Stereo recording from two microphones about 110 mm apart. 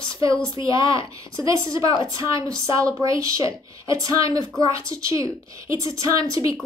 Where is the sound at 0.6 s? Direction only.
30° right (ahead or behind).